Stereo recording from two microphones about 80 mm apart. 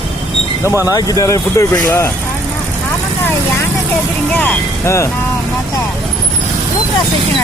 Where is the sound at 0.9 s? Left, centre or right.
Left.